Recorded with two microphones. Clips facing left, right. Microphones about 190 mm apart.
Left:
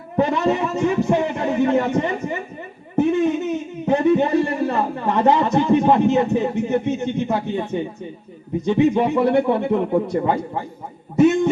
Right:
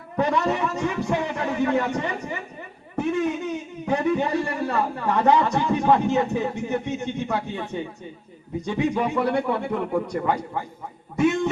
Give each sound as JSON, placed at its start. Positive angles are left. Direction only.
{"t": 0.2, "sound": "a man's voice", "side_deg": 20}